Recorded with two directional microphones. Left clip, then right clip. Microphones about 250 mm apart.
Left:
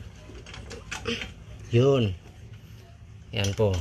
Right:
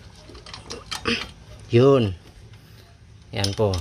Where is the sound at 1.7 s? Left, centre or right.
Right.